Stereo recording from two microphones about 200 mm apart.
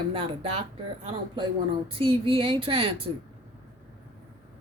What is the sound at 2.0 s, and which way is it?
A woman's voice, 25° right (ahead or behind).